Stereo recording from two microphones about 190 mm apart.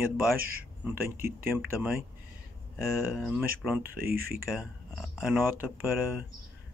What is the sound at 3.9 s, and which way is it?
Speech, 50° right (ahead or behind).